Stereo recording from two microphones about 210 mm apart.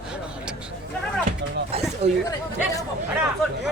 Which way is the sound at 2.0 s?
30° right (ahead or behind).